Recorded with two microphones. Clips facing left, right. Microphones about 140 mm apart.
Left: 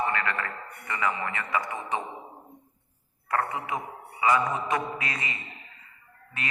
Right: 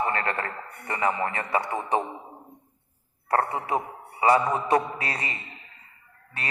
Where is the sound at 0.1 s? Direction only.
35° right (ahead or behind).